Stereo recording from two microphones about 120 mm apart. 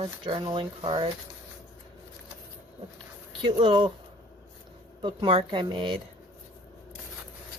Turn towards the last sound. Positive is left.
turn(degrees=-45)  # may be behind; listen again after turning